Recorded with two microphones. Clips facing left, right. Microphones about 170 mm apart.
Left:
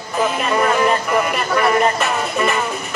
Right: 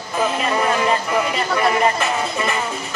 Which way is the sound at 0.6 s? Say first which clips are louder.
Left 4 dB; 55° left (ahead or behind).